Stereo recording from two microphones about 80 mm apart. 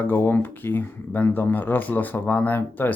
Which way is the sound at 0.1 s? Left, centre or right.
Left.